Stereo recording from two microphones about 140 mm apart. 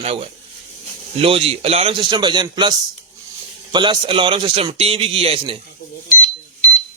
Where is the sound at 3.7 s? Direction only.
35° right (ahead or behind).